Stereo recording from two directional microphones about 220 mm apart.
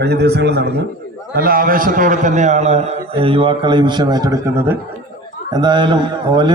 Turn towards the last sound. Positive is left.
turn(degrees=-20)  # may be behind; listen again after turning